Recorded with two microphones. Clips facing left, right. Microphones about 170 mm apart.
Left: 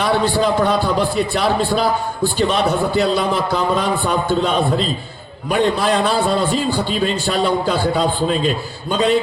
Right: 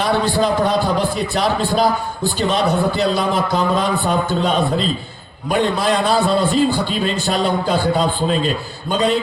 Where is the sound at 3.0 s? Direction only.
45° right (ahead or behind).